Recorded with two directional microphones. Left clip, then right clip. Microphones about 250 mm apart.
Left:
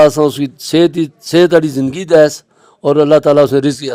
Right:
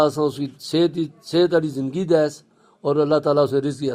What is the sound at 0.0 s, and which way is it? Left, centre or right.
A man's voice, left.